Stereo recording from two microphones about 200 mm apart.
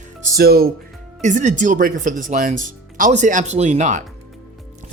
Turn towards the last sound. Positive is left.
turn(degrees=-40)  # may be behind; listen again after turning